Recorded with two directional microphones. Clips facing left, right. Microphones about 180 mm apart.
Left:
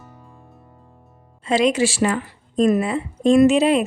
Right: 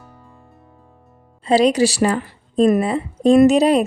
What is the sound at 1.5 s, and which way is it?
A woman's voice, 35° right (ahead or behind).